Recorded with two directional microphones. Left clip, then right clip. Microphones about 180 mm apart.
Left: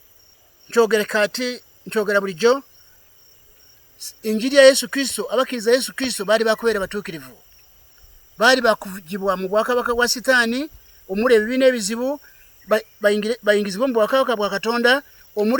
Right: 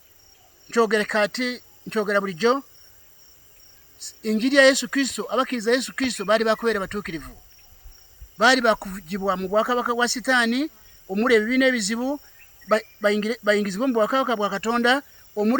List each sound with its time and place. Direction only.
0.7 s speech: 40° left (ahead or behind)
4.0 s speech: 40° left (ahead or behind)
8.4 s speech: 35° left (ahead or behind)